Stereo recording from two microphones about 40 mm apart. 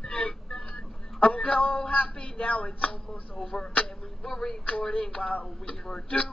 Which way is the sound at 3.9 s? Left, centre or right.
Centre.